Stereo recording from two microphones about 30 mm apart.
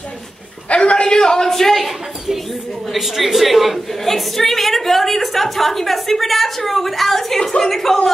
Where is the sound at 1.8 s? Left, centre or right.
Centre.